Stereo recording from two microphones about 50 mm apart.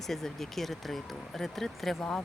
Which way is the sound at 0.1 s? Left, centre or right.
Centre.